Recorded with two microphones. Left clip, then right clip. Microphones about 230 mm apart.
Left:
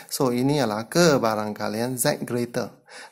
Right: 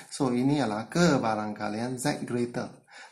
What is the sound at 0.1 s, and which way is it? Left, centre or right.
Speech, left.